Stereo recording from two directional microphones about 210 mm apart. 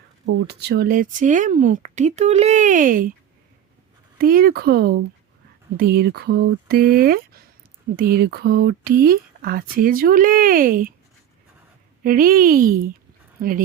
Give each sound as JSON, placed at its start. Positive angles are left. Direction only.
{"t": 0.4, "sound": "speech", "side_deg": -50}
{"t": 4.2, "sound": "speech", "side_deg": -45}
{"t": 12.0, "sound": "speech", "side_deg": -40}